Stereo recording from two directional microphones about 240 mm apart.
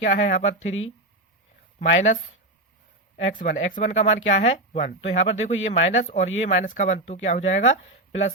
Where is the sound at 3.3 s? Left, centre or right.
Left.